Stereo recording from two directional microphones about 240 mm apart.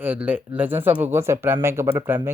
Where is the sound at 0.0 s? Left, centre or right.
Centre.